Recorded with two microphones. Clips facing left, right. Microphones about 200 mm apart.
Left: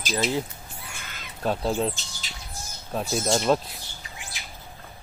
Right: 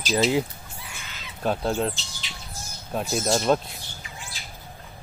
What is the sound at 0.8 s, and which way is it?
Fowl, 55° left (ahead or behind).